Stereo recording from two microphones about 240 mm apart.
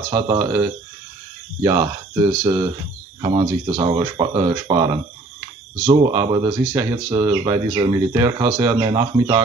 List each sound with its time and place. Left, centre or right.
0.1 s speech: centre